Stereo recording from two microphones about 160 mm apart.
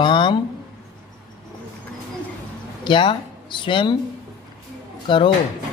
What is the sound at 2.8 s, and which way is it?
Speech, 30° left (ahead or behind).